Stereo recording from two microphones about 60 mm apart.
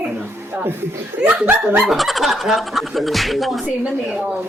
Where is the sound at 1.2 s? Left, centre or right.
Right.